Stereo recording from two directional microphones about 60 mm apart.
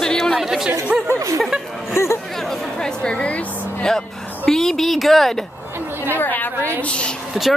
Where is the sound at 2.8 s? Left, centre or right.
Centre.